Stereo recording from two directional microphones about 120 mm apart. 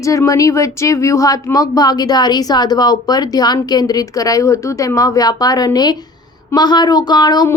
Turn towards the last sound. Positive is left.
turn(degrees=35)  # may be behind; listen again after turning